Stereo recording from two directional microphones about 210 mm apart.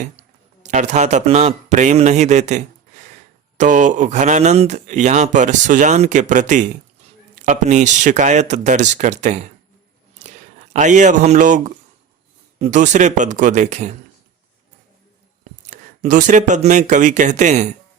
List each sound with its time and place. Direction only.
0.6 s speech: 35° right (ahead or behind)
15.6 s speech: 35° right (ahead or behind)